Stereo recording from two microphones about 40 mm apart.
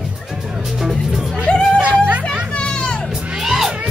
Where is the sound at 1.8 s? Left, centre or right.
Right.